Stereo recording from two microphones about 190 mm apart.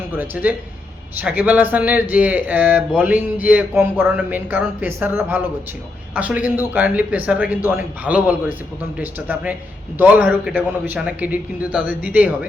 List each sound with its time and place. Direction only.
0.2 s speech: 10° right (ahead or behind)